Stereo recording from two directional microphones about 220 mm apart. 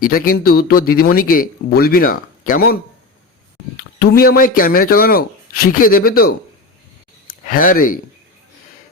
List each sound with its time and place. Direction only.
0.0 s speech: 40° left (ahead or behind)
3.8 s speech: 45° left (ahead or behind)